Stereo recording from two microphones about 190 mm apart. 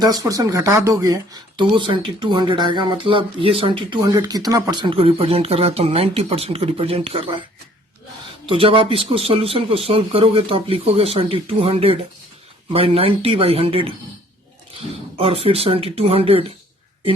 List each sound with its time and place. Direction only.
0.0 s speech: 20° right (ahead or behind)
8.4 s speech: 30° right (ahead or behind)
15.2 s speech: 30° right (ahead or behind)